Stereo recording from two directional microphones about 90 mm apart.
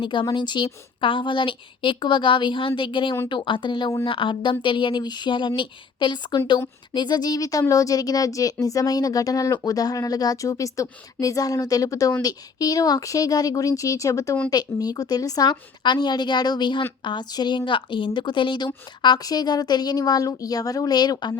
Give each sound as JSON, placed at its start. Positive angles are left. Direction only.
{"t": 0.0, "sound": "a woman's voice", "side_deg": 65}
{"t": 17.7, "sound": "a woman's voice", "side_deg": 65}
{"t": 19.0, "sound": "speech", "side_deg": 50}